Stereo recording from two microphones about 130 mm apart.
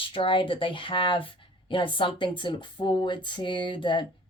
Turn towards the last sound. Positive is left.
turn(degrees=40)  # may be behind; listen again after turning